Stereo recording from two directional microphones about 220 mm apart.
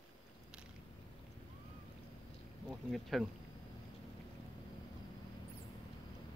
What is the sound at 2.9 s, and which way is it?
Speech, centre (ahead or behind).